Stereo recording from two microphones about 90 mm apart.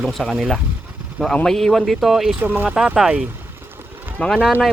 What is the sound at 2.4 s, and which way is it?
Speech, 25° right (ahead or behind).